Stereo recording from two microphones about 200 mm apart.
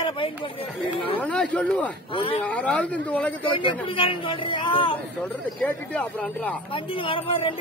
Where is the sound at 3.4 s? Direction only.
25° left (ahead or behind).